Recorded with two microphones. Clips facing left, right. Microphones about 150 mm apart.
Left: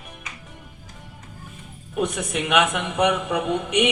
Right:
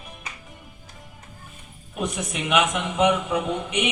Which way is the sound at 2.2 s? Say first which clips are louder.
Even; 65° left (ahead or behind).